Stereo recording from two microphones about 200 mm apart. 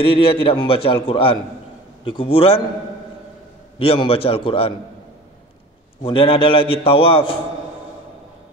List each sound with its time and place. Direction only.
0.0 s a man's voice: 25° left (ahead or behind)
3.8 s a man's voice: 30° left (ahead or behind)
6.0 s a man's voice: 25° left (ahead or behind)